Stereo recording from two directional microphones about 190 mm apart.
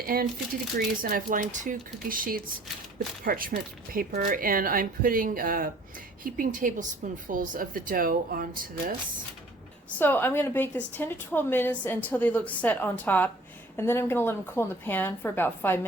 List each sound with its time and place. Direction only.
0.0 s speech: 50° right (ahead or behind)
10.0 s a woman's voice: 10° left (ahead or behind)